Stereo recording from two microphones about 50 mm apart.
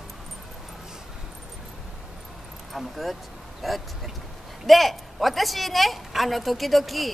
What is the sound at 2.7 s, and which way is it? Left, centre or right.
A woman's voice, centre.